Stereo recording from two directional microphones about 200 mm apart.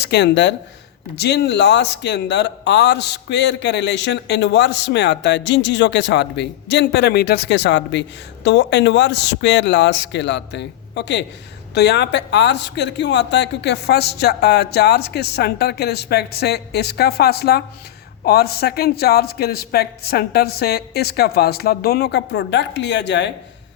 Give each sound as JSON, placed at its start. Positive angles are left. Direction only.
{"t": 0.0, "sound": "a man's voice", "side_deg": 60}